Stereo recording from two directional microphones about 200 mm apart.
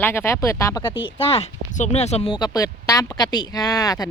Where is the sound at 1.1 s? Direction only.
30° left (ahead or behind).